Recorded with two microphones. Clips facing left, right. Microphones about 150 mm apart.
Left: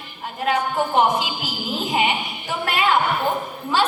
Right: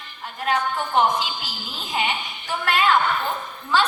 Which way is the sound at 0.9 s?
15° left (ahead or behind).